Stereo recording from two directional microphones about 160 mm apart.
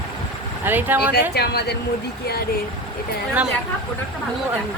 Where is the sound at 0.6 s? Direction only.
10° right (ahead or behind).